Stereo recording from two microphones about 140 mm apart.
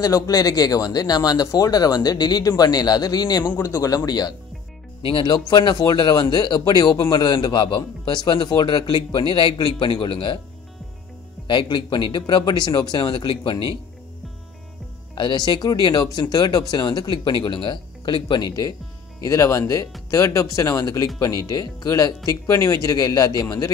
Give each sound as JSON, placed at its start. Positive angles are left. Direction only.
{"t": 0.0, "sound": "a man's voice", "side_deg": 25}
{"t": 11.4, "sound": "a man's voice", "side_deg": 35}
{"t": 15.1, "sound": "a man's voice", "side_deg": 30}